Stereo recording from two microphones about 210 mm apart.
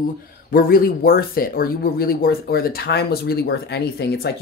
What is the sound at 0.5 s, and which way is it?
Speech, 45° left (ahead or behind).